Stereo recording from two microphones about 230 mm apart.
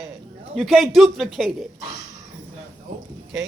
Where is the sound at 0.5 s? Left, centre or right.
Centre.